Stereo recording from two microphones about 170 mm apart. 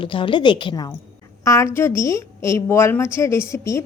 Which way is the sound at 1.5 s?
15° left (ahead or behind).